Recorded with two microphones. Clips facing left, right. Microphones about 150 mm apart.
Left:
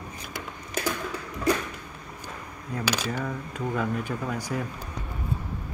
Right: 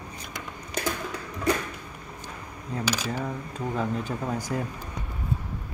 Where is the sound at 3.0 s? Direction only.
25° right (ahead or behind).